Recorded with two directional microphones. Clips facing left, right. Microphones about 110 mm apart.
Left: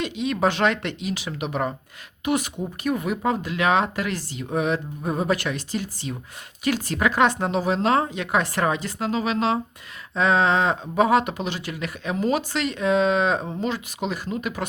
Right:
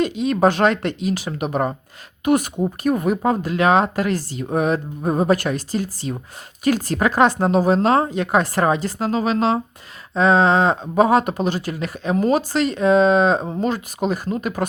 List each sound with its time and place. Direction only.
0.0 s speech: 40° right (ahead or behind)